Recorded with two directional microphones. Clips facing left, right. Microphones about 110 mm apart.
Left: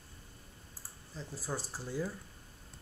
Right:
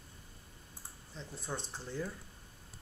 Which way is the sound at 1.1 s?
5° left (ahead or behind).